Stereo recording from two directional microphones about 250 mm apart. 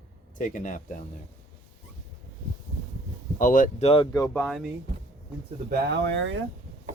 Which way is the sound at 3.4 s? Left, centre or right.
Left.